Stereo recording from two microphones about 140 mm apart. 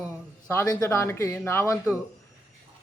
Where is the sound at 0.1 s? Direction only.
15° left (ahead or behind).